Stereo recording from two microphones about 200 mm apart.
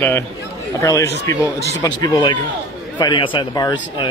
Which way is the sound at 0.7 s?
15° left (ahead or behind).